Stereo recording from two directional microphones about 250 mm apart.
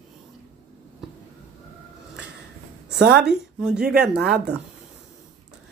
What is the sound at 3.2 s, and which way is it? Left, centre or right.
Speech, centre.